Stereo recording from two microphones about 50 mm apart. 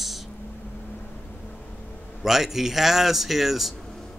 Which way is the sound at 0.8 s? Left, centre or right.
Left.